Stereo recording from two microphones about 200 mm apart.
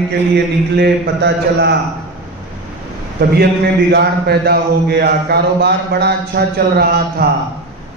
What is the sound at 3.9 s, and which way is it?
Speech, 55° right (ahead or behind).